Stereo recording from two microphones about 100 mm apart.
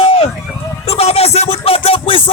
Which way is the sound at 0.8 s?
85° left.